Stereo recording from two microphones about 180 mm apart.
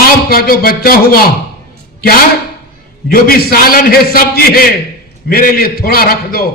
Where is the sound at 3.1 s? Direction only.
55° left (ahead or behind).